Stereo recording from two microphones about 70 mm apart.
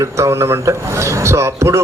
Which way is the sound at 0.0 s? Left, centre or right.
Right.